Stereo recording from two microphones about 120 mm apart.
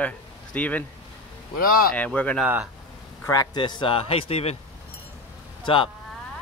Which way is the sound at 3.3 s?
40° left (ahead or behind).